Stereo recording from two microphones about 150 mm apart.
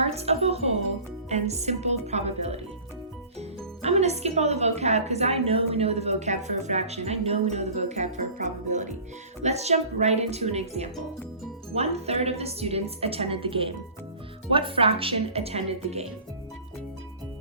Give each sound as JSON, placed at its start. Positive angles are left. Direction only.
{"t": 0.0, "sound": "music", "side_deg": -45}
{"t": 1.3, "sound": "a woman's voice", "side_deg": -45}
{"t": 3.8, "sound": "a woman's voice", "side_deg": -45}